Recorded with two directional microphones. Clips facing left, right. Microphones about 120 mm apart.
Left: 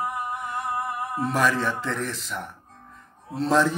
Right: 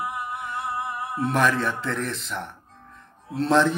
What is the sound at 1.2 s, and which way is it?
A man's voice, centre (ahead or behind).